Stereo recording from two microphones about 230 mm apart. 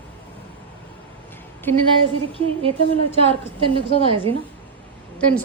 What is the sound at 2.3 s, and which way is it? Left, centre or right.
A woman's voice, right.